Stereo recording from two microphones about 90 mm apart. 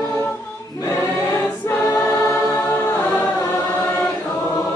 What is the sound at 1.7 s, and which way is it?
Choir, 25° left (ahead or behind).